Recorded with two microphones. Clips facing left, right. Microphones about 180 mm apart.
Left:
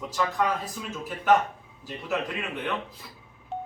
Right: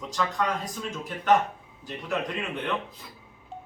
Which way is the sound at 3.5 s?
70° left (ahead or behind).